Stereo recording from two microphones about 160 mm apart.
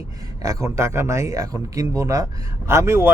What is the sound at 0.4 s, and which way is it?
A man's voice, 20° right (ahead or behind).